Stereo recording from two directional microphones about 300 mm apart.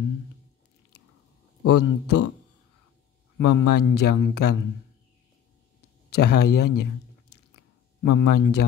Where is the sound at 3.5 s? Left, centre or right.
Left.